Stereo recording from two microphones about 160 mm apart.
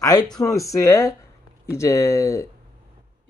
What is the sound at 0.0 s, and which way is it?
Speech, 20° left (ahead or behind).